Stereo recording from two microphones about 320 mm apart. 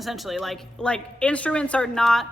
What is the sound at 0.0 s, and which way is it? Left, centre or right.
A woman's voice, centre.